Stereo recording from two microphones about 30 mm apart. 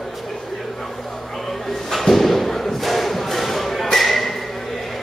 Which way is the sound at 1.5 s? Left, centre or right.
Centre.